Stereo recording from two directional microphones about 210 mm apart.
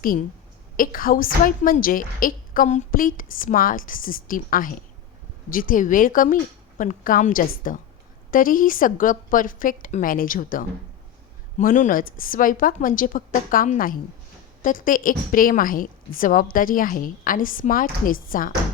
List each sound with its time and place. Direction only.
0.8 s a woman's voice: 40° left (ahead or behind)